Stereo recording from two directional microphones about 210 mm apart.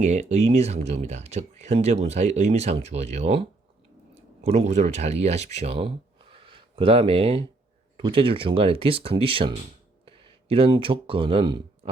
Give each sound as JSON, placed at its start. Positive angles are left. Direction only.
{"t": 0.0, "sound": "speech", "side_deg": -35}